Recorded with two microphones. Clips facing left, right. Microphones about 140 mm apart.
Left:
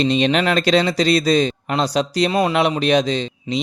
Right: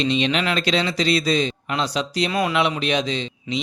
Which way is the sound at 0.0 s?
45° left (ahead or behind).